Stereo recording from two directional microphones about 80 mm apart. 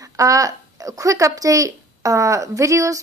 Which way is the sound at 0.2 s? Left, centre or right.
Right.